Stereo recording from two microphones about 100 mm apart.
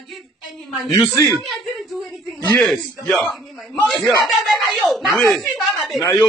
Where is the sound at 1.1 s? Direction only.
35° left (ahead or behind).